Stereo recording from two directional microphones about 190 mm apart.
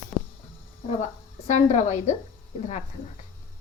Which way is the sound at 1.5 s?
40° left (ahead or behind).